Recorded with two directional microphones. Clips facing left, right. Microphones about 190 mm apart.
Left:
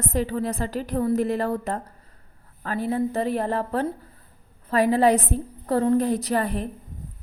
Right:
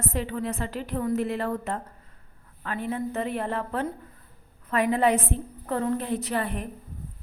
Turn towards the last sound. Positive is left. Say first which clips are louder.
# left 4 dB
turn(degrees=40)  # may be behind; listen again after turning